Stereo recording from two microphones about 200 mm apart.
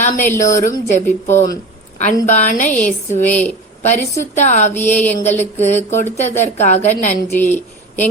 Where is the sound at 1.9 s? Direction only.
35° left (ahead or behind).